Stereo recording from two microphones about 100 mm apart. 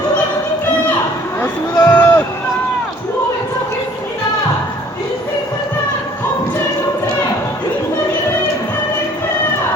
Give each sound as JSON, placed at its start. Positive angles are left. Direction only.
{"t": 1.8, "sound": "run", "side_deg": 20}